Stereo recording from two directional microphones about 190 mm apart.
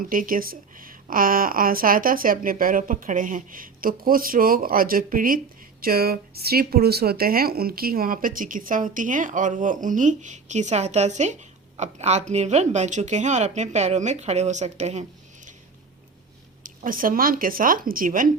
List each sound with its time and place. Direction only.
0.0 s speech: 45° right (ahead or behind)
16.6 s speech: 45° right (ahead or behind)